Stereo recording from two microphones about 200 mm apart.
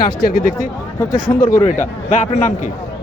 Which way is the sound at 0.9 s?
15° left (ahead or behind).